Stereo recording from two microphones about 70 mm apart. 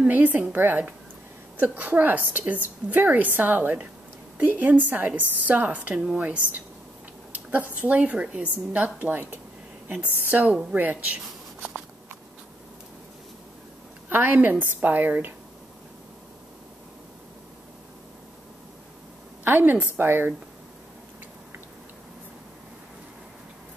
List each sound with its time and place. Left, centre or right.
0.0 s a woman's voice: right
14.0 s a woman's voice: right
19.4 s a woman's voice: right